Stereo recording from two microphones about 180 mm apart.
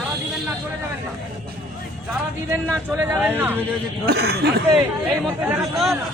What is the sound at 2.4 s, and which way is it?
Speech, 10° right (ahead or behind).